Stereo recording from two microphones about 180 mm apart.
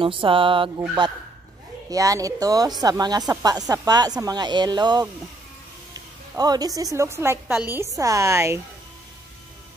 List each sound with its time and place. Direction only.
0.0 s speech: 30° right (ahead or behind)
1.9 s speech: 20° right (ahead or behind)
6.3 s a woman's voice: 20° right (ahead or behind)